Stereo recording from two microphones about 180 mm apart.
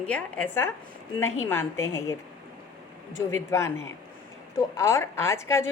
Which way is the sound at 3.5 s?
15° left (ahead or behind).